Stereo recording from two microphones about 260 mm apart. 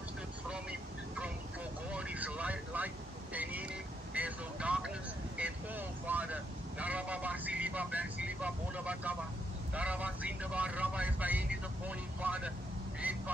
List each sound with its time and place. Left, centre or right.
0.5 s vehicle: centre
4.1 s vehicle: centre
13.0 s goose: centre